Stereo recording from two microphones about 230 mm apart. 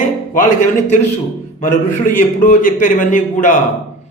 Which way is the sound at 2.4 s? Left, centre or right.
Left.